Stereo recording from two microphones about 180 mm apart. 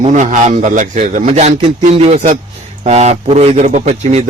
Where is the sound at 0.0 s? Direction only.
40° right (ahead or behind).